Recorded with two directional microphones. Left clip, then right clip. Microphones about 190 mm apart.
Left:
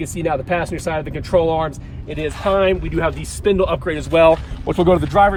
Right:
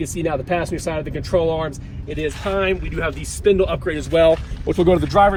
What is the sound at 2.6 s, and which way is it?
Speech, 55° left (ahead or behind).